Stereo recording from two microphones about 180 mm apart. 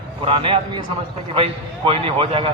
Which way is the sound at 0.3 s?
30° right (ahead or behind).